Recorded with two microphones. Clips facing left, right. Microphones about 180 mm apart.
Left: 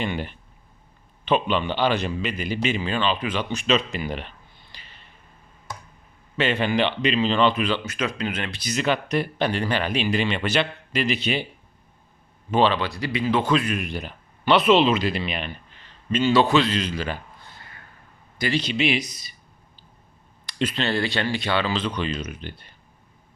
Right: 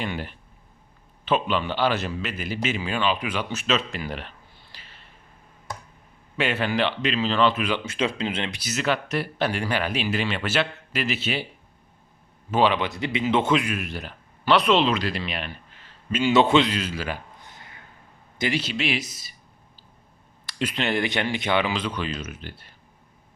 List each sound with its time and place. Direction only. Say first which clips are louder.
0.0 s a man's voice: left 3 dB; centre (ahead or behind)
6.3 s a man's voice: left 2 dB; 5° right (ahead or behind)
7.9 s speech: right 1 dB; 25° right (ahead or behind)
8.5 s a man's voice: left 2 dB; 5° right (ahead or behind)
12.5 s speech: left 1 dB; 5° right (ahead or behind)
12.7 s speech: even; 20° right (ahead or behind)
13.7 s speech: left 2 dB; 5° right (ahead or behind)
16.3 s speech: right 1 dB; 20° right (ahead or behind)
16.7 s speech: left 2 dB; 5° right (ahead or behind)
17.4 s a sound: even; 20° right (ahead or behind)
18.5 s a man's voice: left 6 dB; 5° right (ahead or behind)
20.5 s speech: left 1 dB; 10° right (ahead or behind)